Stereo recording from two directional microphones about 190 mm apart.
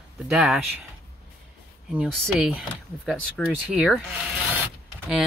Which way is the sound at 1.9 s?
5° right (ahead or behind).